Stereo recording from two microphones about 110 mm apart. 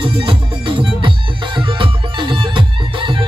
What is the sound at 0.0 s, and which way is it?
Music, 50° right (ahead or behind).